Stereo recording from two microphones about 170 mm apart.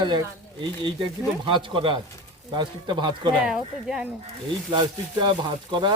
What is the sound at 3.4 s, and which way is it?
Speech, 5° right (ahead or behind).